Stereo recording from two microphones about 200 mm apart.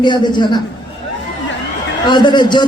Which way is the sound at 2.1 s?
20° left (ahead or behind).